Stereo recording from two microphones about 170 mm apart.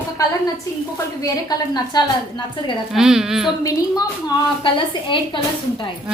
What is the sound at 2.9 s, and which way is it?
Speech, 5° right (ahead or behind).